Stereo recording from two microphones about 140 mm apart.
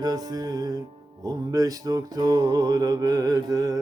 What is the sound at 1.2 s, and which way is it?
Mantra, 25° right (ahead or behind).